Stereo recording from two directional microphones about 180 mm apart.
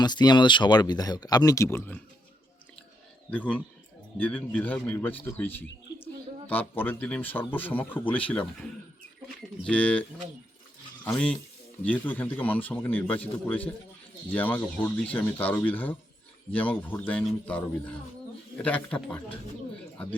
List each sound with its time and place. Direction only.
0.0 s speech: 25° left (ahead or behind)
3.2 s a man's voice: 10° left (ahead or behind)
11.0 s a man's voice: 5° left (ahead or behind)